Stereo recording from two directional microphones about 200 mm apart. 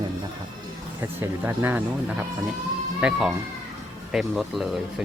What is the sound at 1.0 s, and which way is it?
Speech, 10° right (ahead or behind).